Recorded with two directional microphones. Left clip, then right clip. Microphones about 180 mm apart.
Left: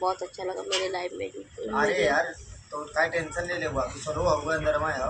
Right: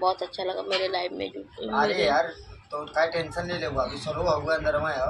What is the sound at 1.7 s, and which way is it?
A man's voice, 25° left (ahead or behind).